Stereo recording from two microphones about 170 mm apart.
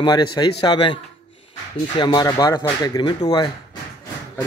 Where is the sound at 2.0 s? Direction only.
25° left (ahead or behind).